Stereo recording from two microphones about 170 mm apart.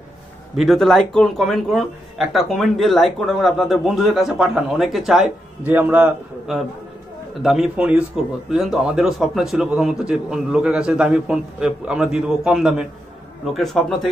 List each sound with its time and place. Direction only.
0.6 s a man's voice: centre (ahead or behind)